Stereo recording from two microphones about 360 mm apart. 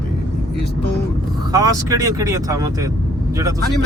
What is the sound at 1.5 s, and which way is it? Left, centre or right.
Speech, centre.